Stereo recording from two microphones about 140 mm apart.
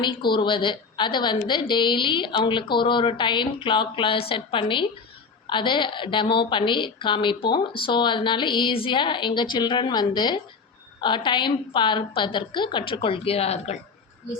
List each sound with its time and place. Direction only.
0.0 s a woman's voice: 35° left (ahead or behind)